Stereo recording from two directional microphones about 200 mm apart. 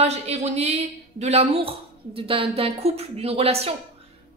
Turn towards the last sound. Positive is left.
turn(degrees=-30)  # may be behind; listen again after turning